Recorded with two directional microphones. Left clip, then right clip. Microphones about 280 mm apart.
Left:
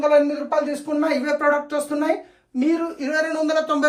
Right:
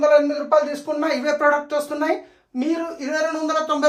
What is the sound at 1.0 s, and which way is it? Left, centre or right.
Speech, right.